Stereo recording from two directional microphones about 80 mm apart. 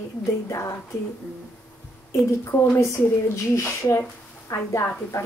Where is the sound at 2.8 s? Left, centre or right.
Left.